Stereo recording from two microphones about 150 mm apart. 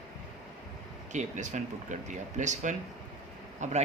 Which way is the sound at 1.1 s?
55° right (ahead or behind).